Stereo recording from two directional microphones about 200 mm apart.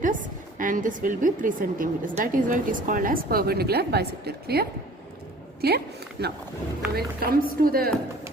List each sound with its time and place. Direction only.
0.0 s a woman's voice: 40° right (ahead or behind)
5.6 s a woman's voice: 55° right (ahead or behind)